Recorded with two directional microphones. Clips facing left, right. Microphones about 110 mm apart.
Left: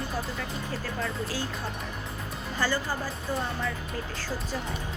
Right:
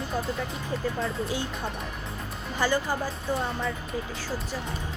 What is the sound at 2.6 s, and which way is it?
Speech, 15° right (ahead or behind).